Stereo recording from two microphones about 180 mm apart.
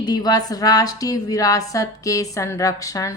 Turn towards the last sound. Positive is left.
turn(degrees=20)  # may be behind; listen again after turning